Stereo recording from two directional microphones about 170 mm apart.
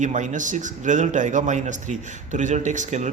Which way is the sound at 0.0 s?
45° right (ahead or behind).